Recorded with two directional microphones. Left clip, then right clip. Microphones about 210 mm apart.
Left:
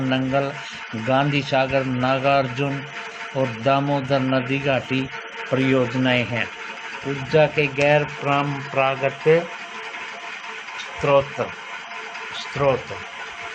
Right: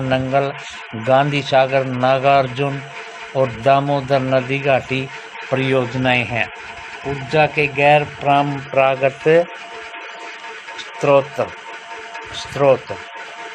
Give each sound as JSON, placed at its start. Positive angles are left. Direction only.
{"t": 0.1, "sound": "a man's voice", "side_deg": -45}
{"t": 11.0, "sound": "a man's voice", "side_deg": -50}